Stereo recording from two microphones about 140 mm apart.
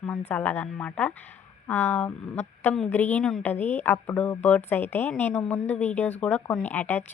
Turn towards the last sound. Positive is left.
turn(degrees=15)  # may be behind; listen again after turning